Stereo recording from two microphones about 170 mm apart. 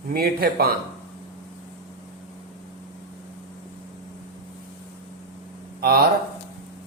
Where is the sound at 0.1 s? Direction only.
65° right (ahead or behind).